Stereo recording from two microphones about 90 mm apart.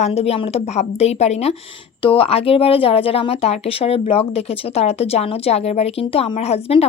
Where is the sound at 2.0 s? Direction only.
85° left.